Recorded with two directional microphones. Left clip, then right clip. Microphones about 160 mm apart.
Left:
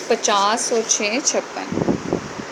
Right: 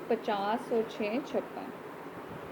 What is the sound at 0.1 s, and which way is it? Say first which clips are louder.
Speech: left 13 dB; 30° left (ahead or behind).